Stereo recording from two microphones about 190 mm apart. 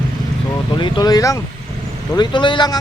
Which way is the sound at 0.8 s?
20° left (ahead or behind).